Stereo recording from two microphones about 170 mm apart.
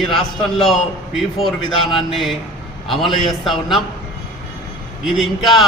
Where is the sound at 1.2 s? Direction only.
Centre (ahead or behind).